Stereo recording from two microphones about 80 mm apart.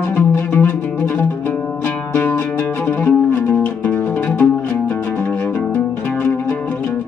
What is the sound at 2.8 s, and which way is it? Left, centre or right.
Music, left.